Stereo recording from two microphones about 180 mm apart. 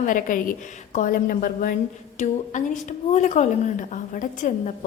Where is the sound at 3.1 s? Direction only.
40° left (ahead or behind).